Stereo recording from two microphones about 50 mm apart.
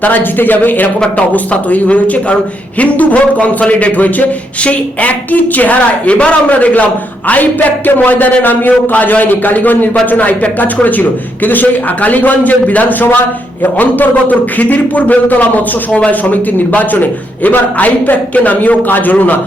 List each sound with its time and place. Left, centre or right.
0.0 s a man's voice: left
1.3 s speech: left
7.9 s a man's voice: left